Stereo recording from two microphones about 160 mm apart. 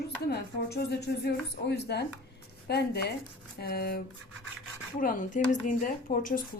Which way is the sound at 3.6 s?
75° left (ahead or behind).